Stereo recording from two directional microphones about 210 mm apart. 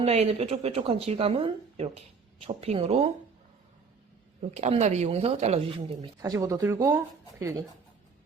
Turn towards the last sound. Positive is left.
turn(degrees=-15)  # may be behind; listen again after turning